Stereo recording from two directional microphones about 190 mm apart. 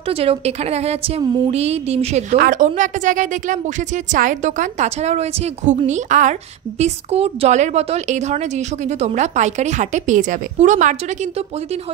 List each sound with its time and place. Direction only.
0.1 s a woman's voice: 30° right (ahead or behind)
2.3 s a woman's voice: 50° right (ahead or behind)